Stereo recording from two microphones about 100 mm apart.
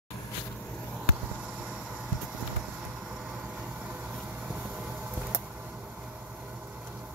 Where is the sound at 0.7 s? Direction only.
10° left (ahead or behind).